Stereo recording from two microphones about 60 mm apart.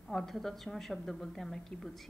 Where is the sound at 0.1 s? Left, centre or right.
Centre.